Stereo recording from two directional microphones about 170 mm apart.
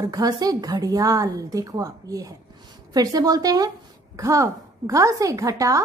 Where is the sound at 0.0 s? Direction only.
20° right (ahead or behind).